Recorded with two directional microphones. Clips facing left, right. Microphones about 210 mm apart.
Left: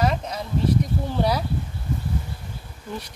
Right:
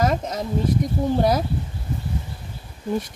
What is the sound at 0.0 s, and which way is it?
Bee, 45° right (ahead or behind).